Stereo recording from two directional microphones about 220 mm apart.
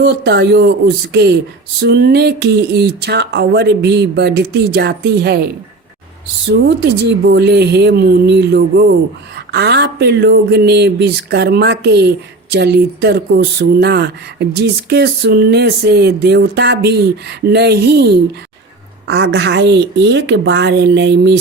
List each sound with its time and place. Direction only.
0.0 s speech: 50° right (ahead or behind)
6.5 s speech: 50° right (ahead or behind)